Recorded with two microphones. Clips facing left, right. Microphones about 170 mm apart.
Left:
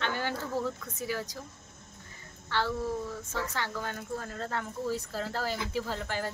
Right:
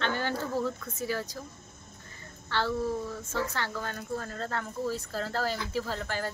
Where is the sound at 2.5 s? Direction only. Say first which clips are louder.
Right 1 dB; 15° left (ahead or behind).